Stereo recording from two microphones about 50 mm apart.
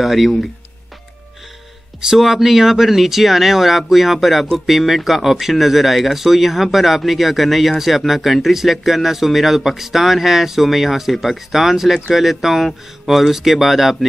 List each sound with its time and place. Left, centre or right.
0.0 s speech: centre
2.0 s speech: centre